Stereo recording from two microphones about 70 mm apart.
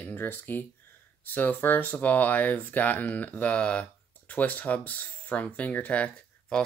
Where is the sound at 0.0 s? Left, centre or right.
Left.